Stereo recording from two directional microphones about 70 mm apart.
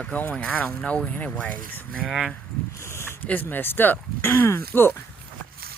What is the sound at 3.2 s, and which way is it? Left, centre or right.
Speech, left.